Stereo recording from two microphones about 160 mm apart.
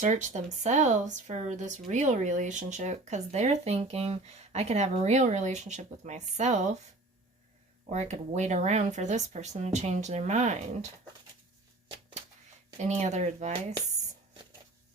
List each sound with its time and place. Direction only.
0.0 s speech: 50° right (ahead or behind)
7.9 s speech: 45° right (ahead or behind)
12.7 s speech: 45° right (ahead or behind)